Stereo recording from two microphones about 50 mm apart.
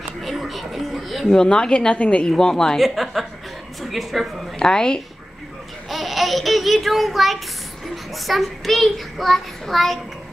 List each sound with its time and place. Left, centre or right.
0.2 s a sound: centre
1.2 s speech: centre
2.2 s a woman's voice: centre
2.8 s speech: centre
4.6 s a woman's voice: centre
5.9 s a sound: centre
7.9 s a child's voice: centre